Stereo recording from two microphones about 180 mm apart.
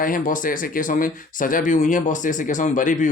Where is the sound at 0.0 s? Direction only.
50° left (ahead or behind).